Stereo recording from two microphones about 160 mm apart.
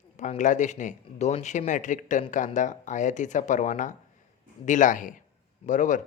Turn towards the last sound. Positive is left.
turn(degrees=50)  # may be behind; listen again after turning